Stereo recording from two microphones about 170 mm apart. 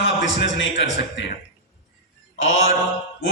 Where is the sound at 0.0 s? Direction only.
90° left.